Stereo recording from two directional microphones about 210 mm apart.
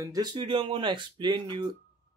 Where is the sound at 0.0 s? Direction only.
20° right (ahead or behind).